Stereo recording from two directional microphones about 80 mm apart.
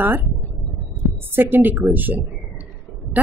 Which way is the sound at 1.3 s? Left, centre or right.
Right.